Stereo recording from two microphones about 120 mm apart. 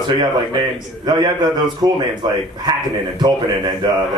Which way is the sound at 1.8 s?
35° right (ahead or behind).